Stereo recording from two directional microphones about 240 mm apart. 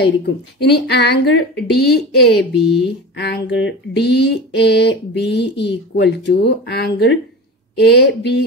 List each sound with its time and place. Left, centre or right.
0.0 s speech: left